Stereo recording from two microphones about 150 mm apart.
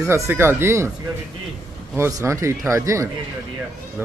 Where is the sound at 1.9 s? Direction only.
15° right (ahead or behind).